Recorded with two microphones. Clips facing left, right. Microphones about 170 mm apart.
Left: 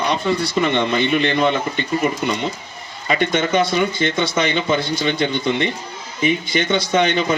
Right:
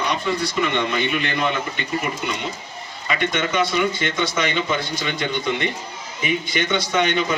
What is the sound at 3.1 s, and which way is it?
Speech, 35° left (ahead or behind).